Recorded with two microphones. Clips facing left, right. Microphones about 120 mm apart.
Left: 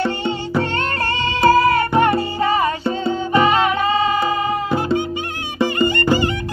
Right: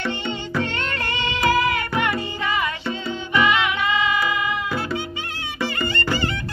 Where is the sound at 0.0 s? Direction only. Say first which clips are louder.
Left 6 dB; 40° left (ahead or behind).